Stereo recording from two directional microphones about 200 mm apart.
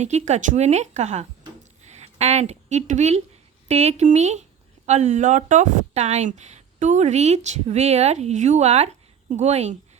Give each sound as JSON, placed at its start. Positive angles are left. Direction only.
{"t": 0.0, "sound": "speech", "side_deg": -35}
{"t": 1.8, "sound": "a sound", "side_deg": -35}
{"t": 3.7, "sound": "speech", "side_deg": -35}